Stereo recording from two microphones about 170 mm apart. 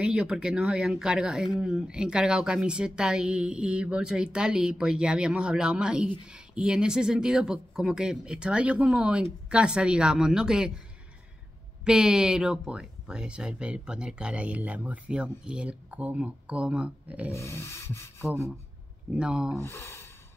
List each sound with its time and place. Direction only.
0.0 s speech: 5° right (ahead or behind)
11.8 s speech: 5° right (ahead or behind)
17.3 s rub: 15° left (ahead or behind)
19.1 s speech: 5° right (ahead or behind)
19.5 s rub: 15° left (ahead or behind)